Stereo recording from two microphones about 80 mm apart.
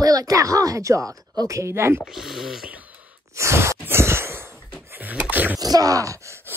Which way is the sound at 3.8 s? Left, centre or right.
Right.